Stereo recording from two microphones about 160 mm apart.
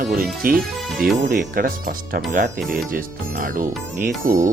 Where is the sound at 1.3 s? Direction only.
65° right (ahead or behind).